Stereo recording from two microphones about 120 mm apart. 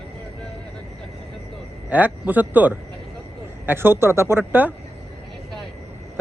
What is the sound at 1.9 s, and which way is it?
A woman's voice, 15° right (ahead or behind).